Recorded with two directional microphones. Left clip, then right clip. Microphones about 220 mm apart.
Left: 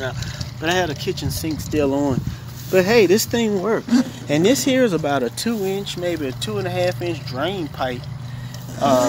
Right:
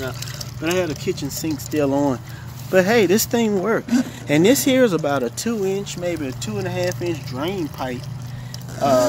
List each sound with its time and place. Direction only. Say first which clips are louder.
0.6 s speech: left 2 dB; centre (ahead or behind)
1.5 s speech: even; 20° right (ahead or behind); by 8.0 s 5° left (ahead or behind)
8.7 s speech: even; 5° right (ahead or behind)